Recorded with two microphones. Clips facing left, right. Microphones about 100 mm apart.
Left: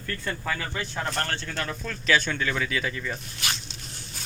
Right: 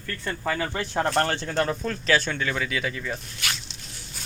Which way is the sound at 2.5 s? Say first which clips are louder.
Even; 10° right (ahead or behind).